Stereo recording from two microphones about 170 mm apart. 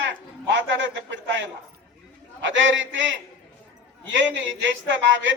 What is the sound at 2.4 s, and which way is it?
Speech, 90° right.